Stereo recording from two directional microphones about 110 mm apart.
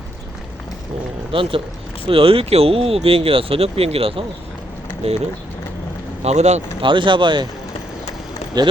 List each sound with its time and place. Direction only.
1.3 s speech: 55° right (ahead or behind)
5.0 s speech: 70° right (ahead or behind)
6.2 s speech: 90° right
6.8 s speech: 50° right (ahead or behind)
8.6 s speech: 40° right (ahead or behind)